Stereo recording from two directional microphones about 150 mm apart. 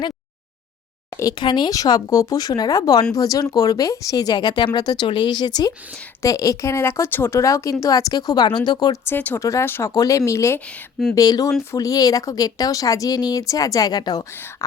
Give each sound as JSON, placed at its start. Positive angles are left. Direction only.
{"t": 1.1, "sound": "a woman's voice", "side_deg": 25}
{"t": 9.0, "sound": "a woman's voice", "side_deg": 15}